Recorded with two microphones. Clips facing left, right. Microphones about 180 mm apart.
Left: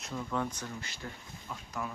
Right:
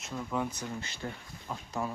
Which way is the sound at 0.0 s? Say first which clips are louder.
Right 1 dB; 10° right (ahead or behind).